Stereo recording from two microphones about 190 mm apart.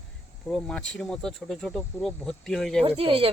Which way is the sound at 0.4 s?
5° left (ahead or behind).